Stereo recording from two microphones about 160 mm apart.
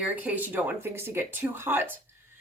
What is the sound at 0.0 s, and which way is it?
Speech, 10° right (ahead or behind).